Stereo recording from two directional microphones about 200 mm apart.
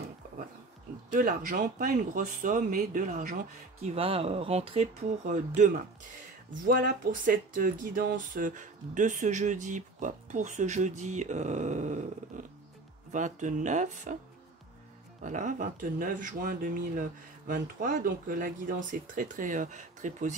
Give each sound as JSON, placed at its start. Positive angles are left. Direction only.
{"t": 1.1, "sound": "speech", "side_deg": -45}
{"t": 3.8, "sound": "speech", "side_deg": -30}
{"t": 7.2, "sound": "speech", "side_deg": -45}
{"t": 15.2, "sound": "speech", "side_deg": -40}